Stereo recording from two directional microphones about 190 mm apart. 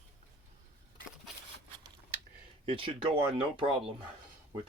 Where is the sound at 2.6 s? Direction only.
30° right (ahead or behind).